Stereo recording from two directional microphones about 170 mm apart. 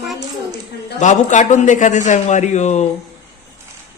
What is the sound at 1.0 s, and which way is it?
A man's voice, 45° left (ahead or behind).